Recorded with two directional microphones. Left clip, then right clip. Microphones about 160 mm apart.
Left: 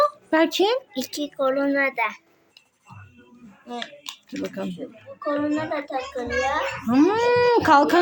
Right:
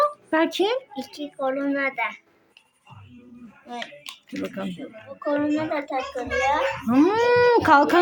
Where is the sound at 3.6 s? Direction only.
5° left (ahead or behind).